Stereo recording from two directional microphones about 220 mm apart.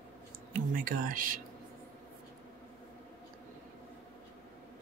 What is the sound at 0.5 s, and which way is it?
Speech, 40° right (ahead or behind).